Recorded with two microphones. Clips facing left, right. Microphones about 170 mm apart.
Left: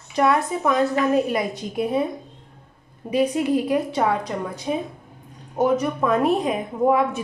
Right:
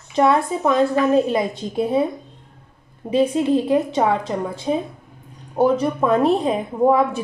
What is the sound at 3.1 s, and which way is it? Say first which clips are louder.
A woman's voice: right 3 dB; 25° right (ahead or behind).